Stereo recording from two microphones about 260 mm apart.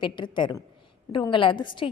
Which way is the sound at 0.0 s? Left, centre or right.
Centre.